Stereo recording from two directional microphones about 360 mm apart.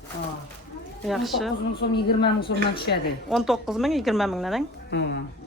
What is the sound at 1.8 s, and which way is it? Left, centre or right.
Speech, left.